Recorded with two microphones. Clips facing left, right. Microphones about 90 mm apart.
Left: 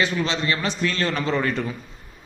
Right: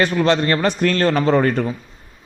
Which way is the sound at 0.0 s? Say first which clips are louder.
Right 7 dB; 50° right (ahead or behind).